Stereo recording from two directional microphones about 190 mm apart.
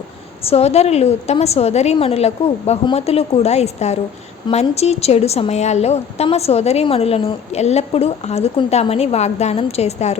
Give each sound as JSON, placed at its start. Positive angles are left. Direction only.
{"t": 0.4, "sound": "a woman's voice", "side_deg": 35}